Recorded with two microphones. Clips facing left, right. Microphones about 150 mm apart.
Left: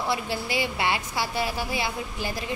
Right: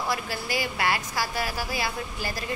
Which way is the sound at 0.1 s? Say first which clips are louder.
Left 2 dB; 25° left (ahead or behind).